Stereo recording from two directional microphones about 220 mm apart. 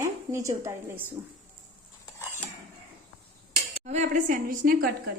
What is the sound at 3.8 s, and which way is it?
A woman's voice, 35° right (ahead or behind).